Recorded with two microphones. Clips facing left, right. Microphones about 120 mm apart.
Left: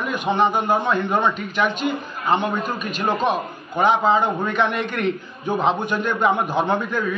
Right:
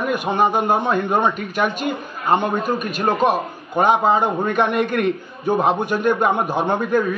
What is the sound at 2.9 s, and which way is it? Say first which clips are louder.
Speech: right 2 dB; 10° right (ahead or behind).